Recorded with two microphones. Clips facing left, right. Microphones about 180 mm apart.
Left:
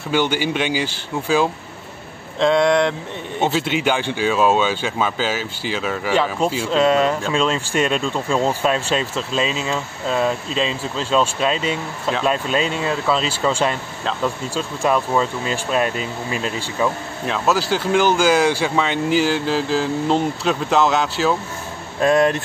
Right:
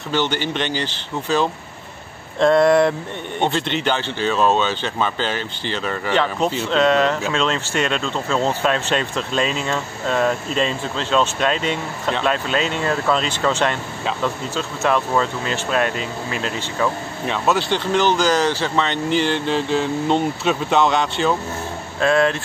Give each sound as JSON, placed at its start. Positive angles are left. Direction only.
{"t": 0.1, "sound": "speech", "side_deg": 10}
{"t": 2.4, "sound": "speech", "side_deg": 0}
{"t": 17.3, "sound": "speech", "side_deg": 0}
{"t": 22.0, "sound": "speech", "side_deg": 15}